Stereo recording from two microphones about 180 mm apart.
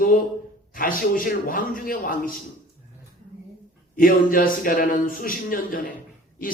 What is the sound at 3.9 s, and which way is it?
Speech, 50° left (ahead or behind).